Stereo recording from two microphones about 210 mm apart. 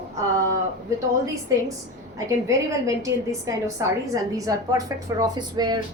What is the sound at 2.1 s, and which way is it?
A woman's voice, 15° right (ahead or behind).